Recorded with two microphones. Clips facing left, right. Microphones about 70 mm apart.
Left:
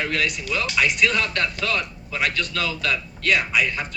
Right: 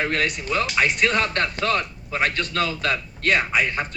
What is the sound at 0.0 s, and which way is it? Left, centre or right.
Speech, right.